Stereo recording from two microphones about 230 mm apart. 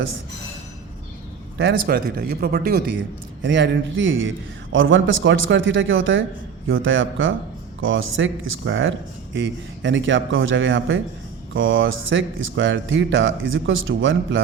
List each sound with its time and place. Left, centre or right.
1.5 s speech: right